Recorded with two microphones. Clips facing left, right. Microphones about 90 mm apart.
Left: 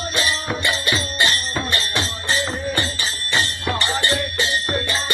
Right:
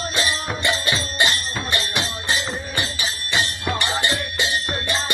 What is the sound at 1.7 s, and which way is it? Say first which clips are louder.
Music: left 1 dB; 10° right (ahead or behind).